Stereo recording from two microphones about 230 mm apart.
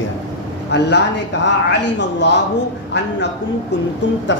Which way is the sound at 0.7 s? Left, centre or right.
Left.